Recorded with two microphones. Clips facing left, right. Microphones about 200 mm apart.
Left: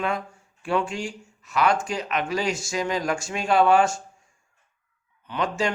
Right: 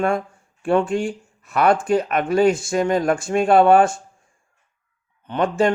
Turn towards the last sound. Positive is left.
turn(degrees=-55)  # may be behind; listen again after turning